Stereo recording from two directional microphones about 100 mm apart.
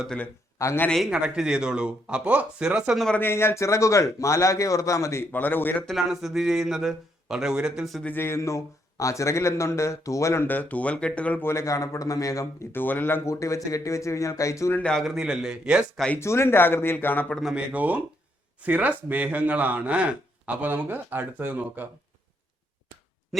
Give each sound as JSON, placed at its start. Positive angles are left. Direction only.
{"t": 0.6, "sound": "a man's voice", "side_deg": 35}
{"t": 1.1, "sound": "speech", "side_deg": -10}
{"t": 3.2, "sound": "a man's voice", "side_deg": 25}
{"t": 5.8, "sound": "a man's voice", "side_deg": 0}
{"t": 8.0, "sound": "speech", "side_deg": 20}
{"t": 11.4, "sound": "speech", "side_deg": 30}
{"t": 13.3, "sound": "a man's voice", "side_deg": 30}
{"t": 14.7, "sound": "a man's voice", "side_deg": 15}
{"t": 14.9, "sound": "speech", "side_deg": 0}
{"t": 16.1, "sound": "speech", "side_deg": 25}
{"t": 17.5, "sound": "speech", "side_deg": -15}